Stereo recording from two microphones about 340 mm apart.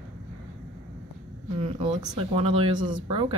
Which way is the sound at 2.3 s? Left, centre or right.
Centre.